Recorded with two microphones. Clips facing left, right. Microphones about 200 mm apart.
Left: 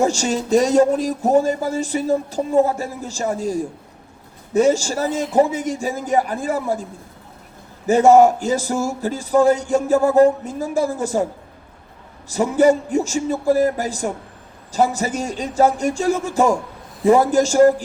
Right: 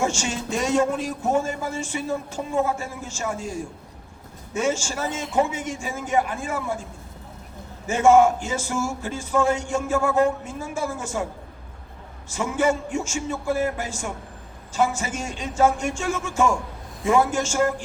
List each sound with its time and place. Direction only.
0.0 s speech: 35° left (ahead or behind)
7.9 s speech: 35° left (ahead or behind)
12.3 s speech: 35° left (ahead or behind)